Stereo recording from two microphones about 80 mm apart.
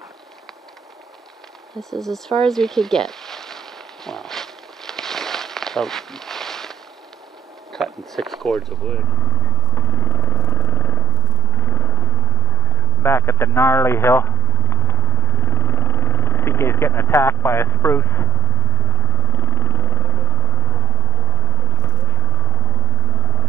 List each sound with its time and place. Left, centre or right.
1.8 s a sound: centre
7.7 s speech: centre
9.8 s vehicle: left